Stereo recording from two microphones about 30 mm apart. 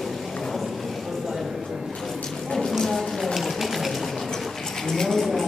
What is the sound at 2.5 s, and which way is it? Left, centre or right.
Clip-clop, centre.